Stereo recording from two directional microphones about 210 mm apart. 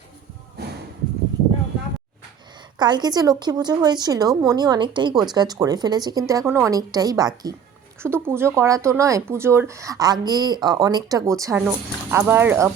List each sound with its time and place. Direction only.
2.7 s a woman's voice: 20° right (ahead or behind)